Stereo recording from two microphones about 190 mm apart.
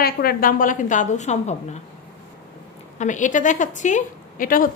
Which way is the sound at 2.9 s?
40° left (ahead or behind).